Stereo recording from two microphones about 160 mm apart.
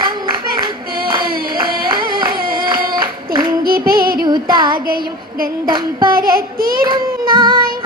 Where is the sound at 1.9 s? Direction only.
25° right (ahead or behind).